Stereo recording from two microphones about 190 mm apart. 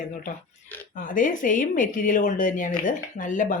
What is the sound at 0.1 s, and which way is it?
Speech, 45° left (ahead or behind).